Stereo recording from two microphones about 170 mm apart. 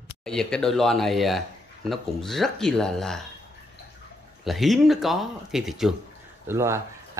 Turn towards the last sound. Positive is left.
turn(degrees=-15)  # may be behind; listen again after turning